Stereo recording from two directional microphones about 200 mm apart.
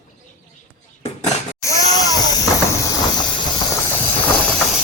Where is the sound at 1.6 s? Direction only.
15° left (ahead or behind).